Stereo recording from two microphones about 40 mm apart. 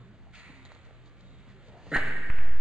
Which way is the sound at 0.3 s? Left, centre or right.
Right.